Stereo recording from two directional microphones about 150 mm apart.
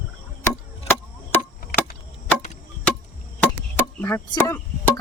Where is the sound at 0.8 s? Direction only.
15° left (ahead or behind).